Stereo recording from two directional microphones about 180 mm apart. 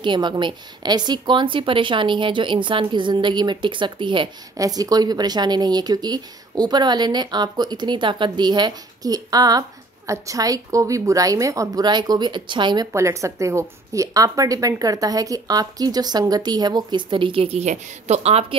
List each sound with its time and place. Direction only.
0.0 s a woman's voice: 25° right (ahead or behind)